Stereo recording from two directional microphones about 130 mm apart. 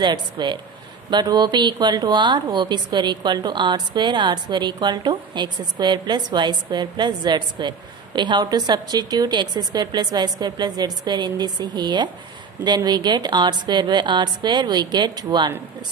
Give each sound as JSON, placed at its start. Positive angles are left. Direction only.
{"t": 0.0, "sound": "a woman's voice", "side_deg": -35}